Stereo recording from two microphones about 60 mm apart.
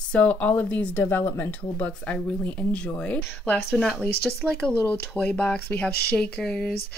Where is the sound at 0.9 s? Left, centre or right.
Left.